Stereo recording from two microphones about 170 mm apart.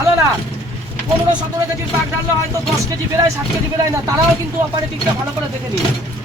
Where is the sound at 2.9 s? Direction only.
20° right (ahead or behind).